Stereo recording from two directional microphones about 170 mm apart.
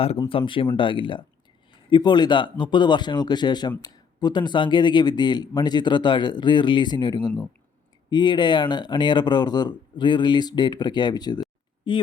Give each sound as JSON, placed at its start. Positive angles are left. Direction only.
{"t": 0.3, "sound": "speech", "side_deg": 30}